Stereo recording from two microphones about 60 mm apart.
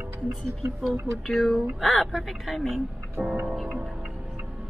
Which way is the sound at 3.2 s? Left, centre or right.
Right.